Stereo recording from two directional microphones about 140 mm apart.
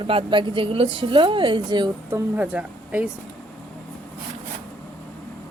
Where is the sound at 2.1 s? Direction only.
10° right (ahead or behind).